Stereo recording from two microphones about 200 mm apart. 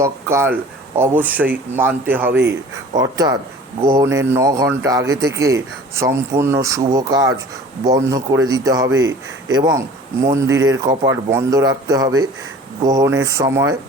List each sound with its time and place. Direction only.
0.0 s a man's voice: 15° right (ahead or behind)